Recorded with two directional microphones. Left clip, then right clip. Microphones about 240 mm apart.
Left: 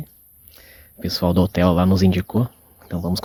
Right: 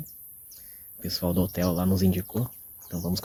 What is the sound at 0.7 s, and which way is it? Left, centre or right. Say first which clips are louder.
Speech: left 7 dB; left.